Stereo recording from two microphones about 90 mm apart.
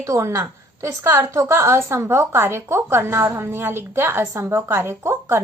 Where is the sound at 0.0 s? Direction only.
30° right (ahead or behind).